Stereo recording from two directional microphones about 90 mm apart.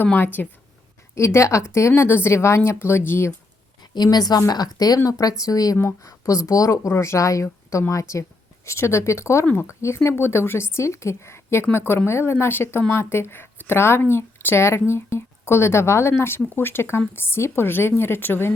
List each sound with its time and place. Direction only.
0.0 s speech: 20° left (ahead or behind)
1.1 s speech: 30° left (ahead or behind)
3.9 s speech: 50° left (ahead or behind); by 18.5 s 25° left (ahead or behind)